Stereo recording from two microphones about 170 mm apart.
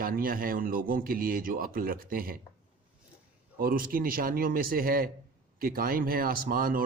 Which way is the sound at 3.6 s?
55° right (ahead or behind).